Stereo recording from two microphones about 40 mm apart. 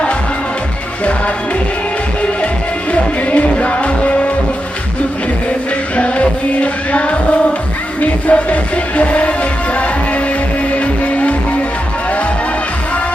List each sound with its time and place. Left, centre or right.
2.9 s music: left
6.0 s music: left